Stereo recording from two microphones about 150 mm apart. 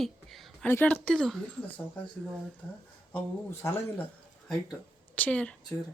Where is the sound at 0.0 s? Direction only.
Centre (ahead or behind).